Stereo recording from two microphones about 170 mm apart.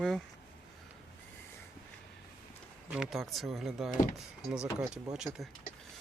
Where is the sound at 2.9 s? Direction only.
Centre (ahead or behind).